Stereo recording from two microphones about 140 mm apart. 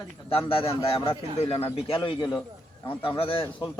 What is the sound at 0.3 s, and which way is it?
A man's voice, 40° left (ahead or behind).